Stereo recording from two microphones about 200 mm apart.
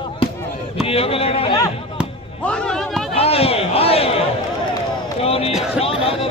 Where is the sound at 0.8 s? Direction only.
30° left (ahead or behind).